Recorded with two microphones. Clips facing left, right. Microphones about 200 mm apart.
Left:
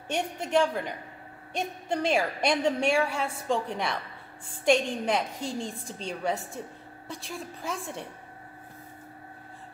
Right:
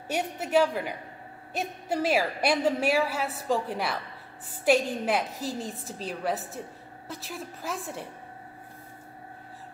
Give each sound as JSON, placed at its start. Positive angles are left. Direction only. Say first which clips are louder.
{"t": 0.1, "sound": "a woman's voice", "louder": "right 1 dB", "side_deg": -5}